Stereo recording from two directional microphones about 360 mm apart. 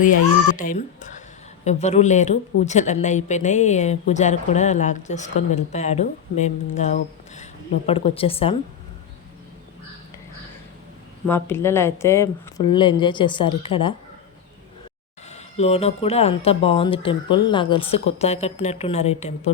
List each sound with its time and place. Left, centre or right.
0.5 s speech: left
11.3 s speech: centre
15.3 s speech: centre